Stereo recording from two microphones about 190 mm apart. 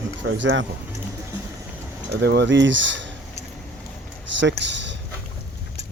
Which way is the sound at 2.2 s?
65° right (ahead or behind).